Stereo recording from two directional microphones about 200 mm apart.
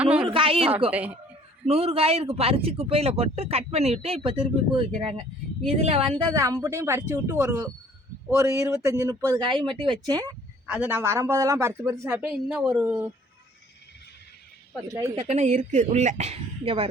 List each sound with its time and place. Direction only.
0.2 s speech: 25° right (ahead or behind)
0.9 s speech: 10° right (ahead or behind)
1.6 s speech: 30° right (ahead or behind)
6.3 s a woman's voice: 15° right (ahead or behind)
14.8 s speech: 15° right (ahead or behind)
15.3 s speech: 35° right (ahead or behind)